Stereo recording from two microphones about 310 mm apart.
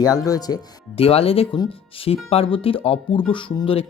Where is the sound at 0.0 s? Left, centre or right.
Centre.